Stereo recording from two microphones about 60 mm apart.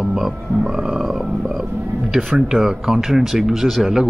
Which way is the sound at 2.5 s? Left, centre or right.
Centre.